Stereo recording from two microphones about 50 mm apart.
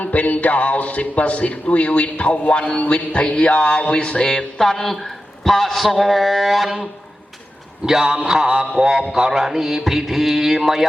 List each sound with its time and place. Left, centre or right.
0.0 s music: left; by 4.9 s centre
5.4 s a man's voice: centre
7.9 s a sound: centre